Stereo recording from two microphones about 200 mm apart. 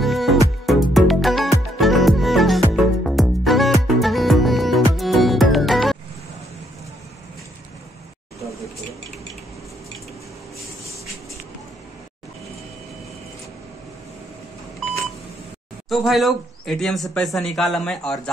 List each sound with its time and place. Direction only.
0.0 s music: centre (ahead or behind)
15.9 s speech: centre (ahead or behind)